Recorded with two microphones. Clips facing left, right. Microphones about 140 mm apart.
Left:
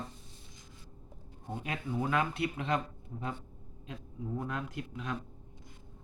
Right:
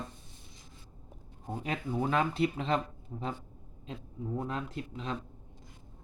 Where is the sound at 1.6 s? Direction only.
30° right (ahead or behind).